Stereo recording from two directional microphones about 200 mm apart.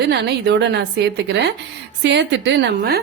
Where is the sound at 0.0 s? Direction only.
55° right (ahead or behind).